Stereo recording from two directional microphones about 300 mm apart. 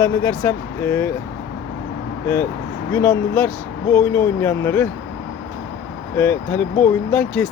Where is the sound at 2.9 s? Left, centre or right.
Centre.